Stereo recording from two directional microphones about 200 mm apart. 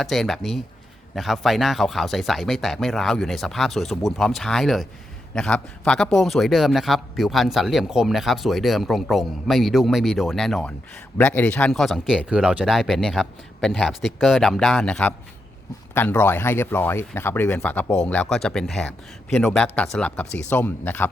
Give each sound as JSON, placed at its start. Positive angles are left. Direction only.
{"t": 0.0, "sound": "speech", "side_deg": 0}